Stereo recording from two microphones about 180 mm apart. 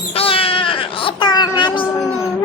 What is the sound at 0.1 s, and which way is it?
Baby cry, 30° left (ahead or behind).